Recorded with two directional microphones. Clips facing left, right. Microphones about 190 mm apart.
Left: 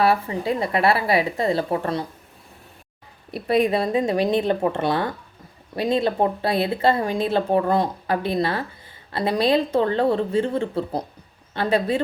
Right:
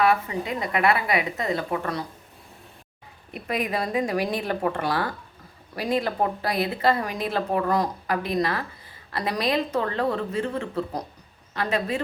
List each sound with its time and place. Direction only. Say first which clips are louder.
0.0 s a woman's voice: left 2 dB; 30° left (ahead or behind)
3.3 s a woman's voice: left 8 dB; 30° left (ahead or behind)